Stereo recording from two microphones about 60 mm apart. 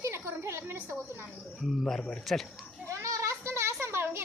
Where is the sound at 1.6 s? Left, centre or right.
Centre.